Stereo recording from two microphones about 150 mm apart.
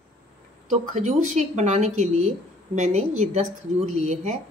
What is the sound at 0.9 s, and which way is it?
A woman's voice, 50° right (ahead or behind).